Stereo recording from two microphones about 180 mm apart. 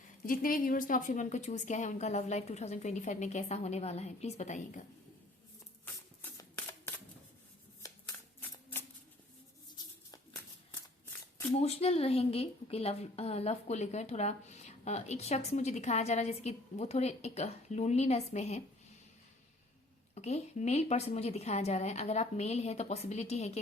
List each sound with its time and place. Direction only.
0.3 s a woman's voice: 50° left (ahead or behind)
6.3 s camera: 15° left (ahead or behind)
11.5 s a woman's voice: 35° left (ahead or behind)
20.1 s a woman's voice: 35° left (ahead or behind)